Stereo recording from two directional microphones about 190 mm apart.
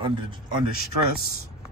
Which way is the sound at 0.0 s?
25° right (ahead or behind).